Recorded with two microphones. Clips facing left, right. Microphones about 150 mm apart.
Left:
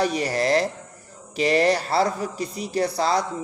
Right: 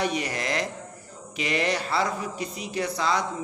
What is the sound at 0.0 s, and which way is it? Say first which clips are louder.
A man's voice: left 5 dB; 35° left (ahead or behind).